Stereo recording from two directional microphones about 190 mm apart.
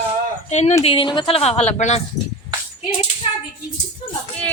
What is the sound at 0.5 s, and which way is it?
Speech, 35° left (ahead or behind).